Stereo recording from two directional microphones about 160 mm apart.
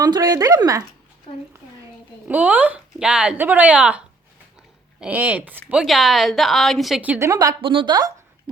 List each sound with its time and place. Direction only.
0.0 s speech: 25° right (ahead or behind)
2.2 s speech: 10° right (ahead or behind)
7.6 s speech: 30° right (ahead or behind)